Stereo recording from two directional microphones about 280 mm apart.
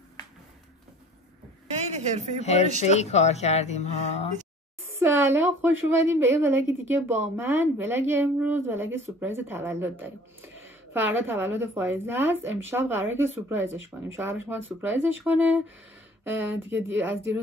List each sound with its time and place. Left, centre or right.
1.7 s a sound: right
2.4 s speech: left
4.9 s a woman's voice: centre
16.7 s a woman's voice: centre